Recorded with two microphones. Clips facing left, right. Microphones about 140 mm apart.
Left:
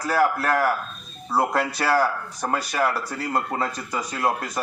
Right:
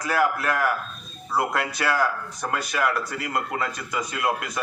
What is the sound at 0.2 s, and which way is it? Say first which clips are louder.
Speech: left 3 dB; 30° left (ahead or behind).